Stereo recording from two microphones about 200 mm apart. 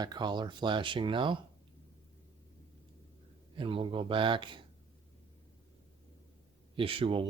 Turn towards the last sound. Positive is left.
turn(degrees=-25)  # may be behind; listen again after turning